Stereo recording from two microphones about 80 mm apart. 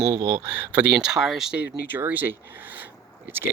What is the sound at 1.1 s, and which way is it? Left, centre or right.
Speech, centre.